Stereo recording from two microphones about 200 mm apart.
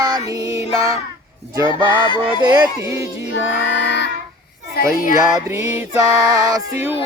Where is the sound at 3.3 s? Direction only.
60° left (ahead or behind).